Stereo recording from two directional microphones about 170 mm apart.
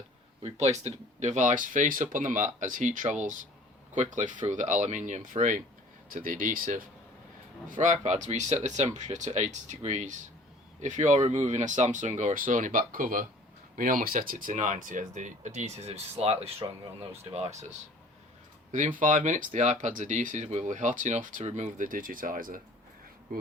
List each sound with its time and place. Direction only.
0.4 s speech: 40° right (ahead or behind)
18.9 s speech: 50° right (ahead or behind)